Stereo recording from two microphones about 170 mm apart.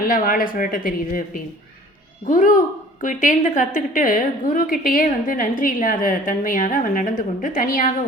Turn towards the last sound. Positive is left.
turn(degrees=55)  # may be behind; listen again after turning